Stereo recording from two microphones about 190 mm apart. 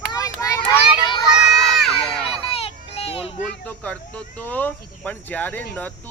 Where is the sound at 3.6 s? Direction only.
5° left (ahead or behind).